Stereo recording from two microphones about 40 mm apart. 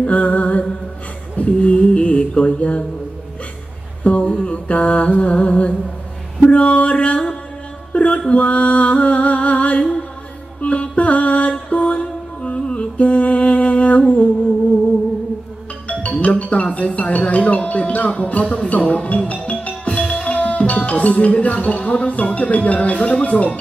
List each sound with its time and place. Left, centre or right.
0.0 s music: left
1.3 s a sound: left
4.0 s a sound: left
4.3 s music: left
7.9 s a sound: left
8.3 s music: left
10.6 s mantra: left
15.9 s speech: left
18.5 s music: left